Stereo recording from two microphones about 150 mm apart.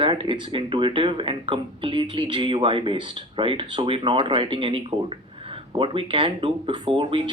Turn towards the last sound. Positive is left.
turn(degrees=-35)  # may be behind; listen again after turning